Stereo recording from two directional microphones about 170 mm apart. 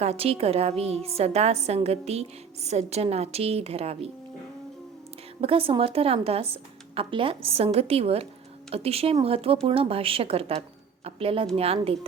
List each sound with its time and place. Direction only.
0.0 s a woman's voice: 35° right (ahead or behind)
5.4 s a woman's voice: 35° right (ahead or behind)